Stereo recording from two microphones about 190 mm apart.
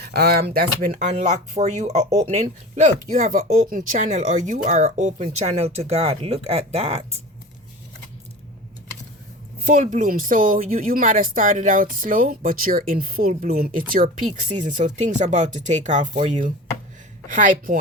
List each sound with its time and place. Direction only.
0.0 s speech: 55° right (ahead or behind)
0.9 s speech: 40° right (ahead or behind)
9.6 s speech: 40° right (ahead or behind)